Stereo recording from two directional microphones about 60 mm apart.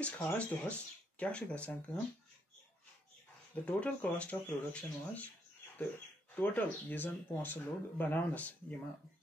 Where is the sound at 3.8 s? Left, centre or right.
Left.